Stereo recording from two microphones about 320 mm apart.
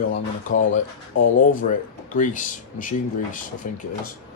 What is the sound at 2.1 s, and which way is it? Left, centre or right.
Speech, left.